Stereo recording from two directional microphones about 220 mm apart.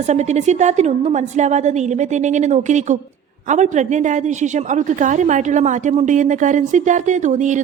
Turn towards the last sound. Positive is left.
turn(degrees=-35)  # may be behind; listen again after turning